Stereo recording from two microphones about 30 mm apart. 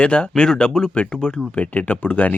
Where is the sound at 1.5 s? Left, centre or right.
Left.